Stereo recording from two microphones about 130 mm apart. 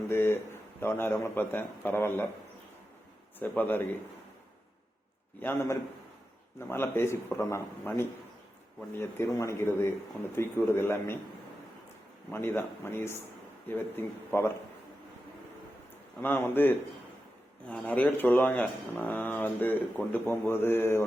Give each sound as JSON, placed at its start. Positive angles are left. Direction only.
{"t": 0.1, "sound": "speech", "side_deg": 20}
{"t": 3.3, "sound": "speech", "side_deg": 15}
{"t": 5.4, "sound": "a man's voice", "side_deg": 15}
{"t": 12.3, "sound": "speech", "side_deg": 15}
{"t": 16.2, "sound": "speech", "side_deg": 15}